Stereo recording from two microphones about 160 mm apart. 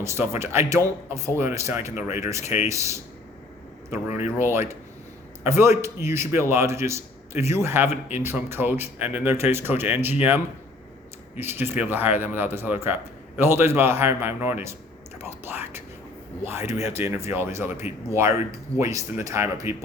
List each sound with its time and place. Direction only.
0.0 s a man's voice: 15° right (ahead or behind)
11.3 s a man's voice: 15° right (ahead or behind)